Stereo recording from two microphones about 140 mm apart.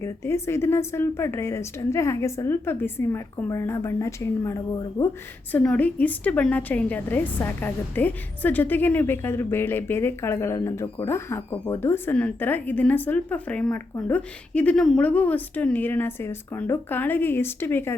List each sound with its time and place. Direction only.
0.0 s a woman's voice: 20° left (ahead or behind)
5.5 s a woman's voice: 10° left (ahead or behind)